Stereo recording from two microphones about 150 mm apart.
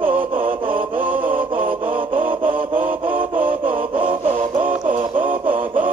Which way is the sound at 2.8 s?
10° right (ahead or behind).